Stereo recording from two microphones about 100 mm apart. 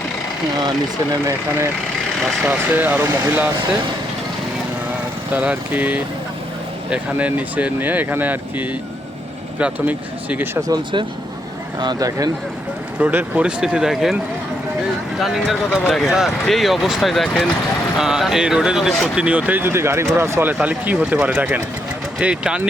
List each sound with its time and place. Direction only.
2.4 s speech: 20° right (ahead or behind)
5.3 s speech: 15° right (ahead or behind)
11.8 s speech: 40° right (ahead or behind)
13.0 s speech: 15° right (ahead or behind)
15.2 s speech: centre (ahead or behind)
17.9 s speech: 5° right (ahead or behind)
19.1 s speech: 10° right (ahead or behind)
20.5 s speech: 15° right (ahead or behind)